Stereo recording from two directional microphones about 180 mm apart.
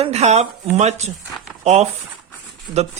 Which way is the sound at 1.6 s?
35° right (ahead or behind).